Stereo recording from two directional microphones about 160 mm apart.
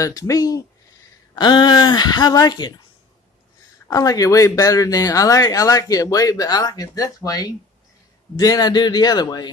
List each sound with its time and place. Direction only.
0.0 s speech: 20° left (ahead or behind)
3.9 s speech: 20° left (ahead or behind)